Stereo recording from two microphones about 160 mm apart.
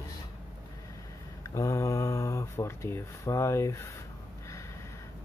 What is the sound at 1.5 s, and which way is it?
Speech, 20° left (ahead or behind).